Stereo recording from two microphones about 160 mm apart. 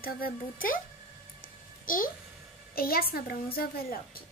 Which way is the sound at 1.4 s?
60° left (ahead or behind).